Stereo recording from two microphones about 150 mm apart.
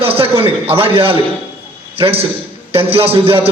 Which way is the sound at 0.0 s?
40° right (ahead or behind).